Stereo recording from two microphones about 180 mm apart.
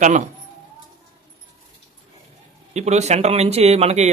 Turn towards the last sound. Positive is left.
turn(degrees=-35)  # may be behind; listen again after turning